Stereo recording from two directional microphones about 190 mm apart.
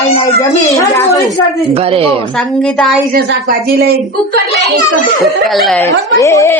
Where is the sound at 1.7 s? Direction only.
30° right (ahead or behind).